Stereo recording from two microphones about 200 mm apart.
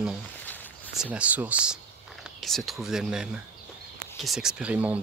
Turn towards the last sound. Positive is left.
turn(degrees=-5)  # may be behind; listen again after turning